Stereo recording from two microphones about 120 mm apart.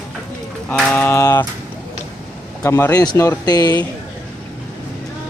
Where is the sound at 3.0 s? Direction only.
30° left (ahead or behind).